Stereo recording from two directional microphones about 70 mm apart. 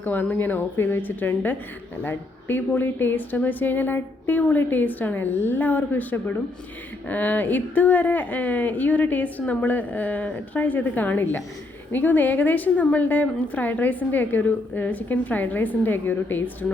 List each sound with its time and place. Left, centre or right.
0.0 s a woman's voice: left